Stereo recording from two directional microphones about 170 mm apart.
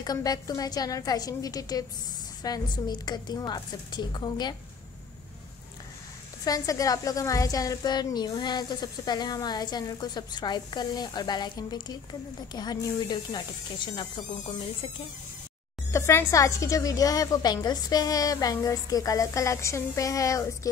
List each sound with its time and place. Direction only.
0.0 s a woman's voice: 25° left (ahead or behind)
6.4 s a woman's voice: 20° left (ahead or behind)
15.9 s a woman's voice: 15° left (ahead or behind)